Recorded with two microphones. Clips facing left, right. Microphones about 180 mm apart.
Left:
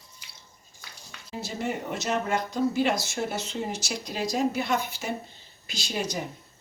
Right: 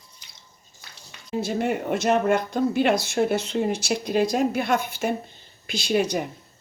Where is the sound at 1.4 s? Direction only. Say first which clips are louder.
Right 7 dB; 60° right (ahead or behind).